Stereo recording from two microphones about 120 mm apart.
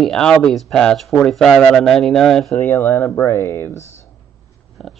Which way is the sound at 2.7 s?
20° left (ahead or behind).